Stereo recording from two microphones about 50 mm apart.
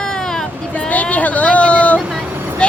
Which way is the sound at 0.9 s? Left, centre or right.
Left.